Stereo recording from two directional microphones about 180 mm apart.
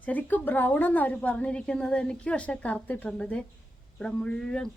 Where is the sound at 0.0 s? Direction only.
10° left (ahead or behind).